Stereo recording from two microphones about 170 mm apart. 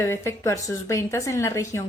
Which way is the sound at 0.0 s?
15° left (ahead or behind).